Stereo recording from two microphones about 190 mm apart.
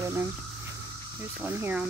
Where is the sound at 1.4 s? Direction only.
10° right (ahead or behind).